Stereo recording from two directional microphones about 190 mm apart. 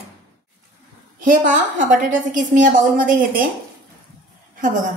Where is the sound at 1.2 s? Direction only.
45° right (ahead or behind).